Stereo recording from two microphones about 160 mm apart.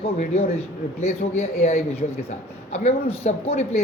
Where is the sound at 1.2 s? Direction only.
60° left (ahead or behind).